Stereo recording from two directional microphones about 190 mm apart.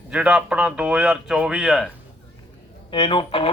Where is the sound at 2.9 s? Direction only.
25° left (ahead or behind).